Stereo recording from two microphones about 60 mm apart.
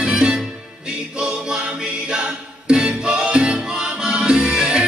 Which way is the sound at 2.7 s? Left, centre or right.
Centre.